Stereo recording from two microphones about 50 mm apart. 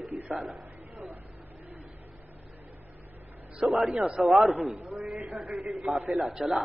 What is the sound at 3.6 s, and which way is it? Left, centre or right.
Speech, centre.